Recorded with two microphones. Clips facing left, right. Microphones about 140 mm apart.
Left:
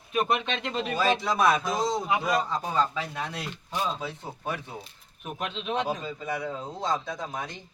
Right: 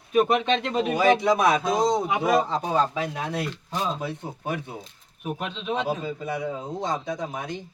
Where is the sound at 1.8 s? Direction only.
20° right (ahead or behind).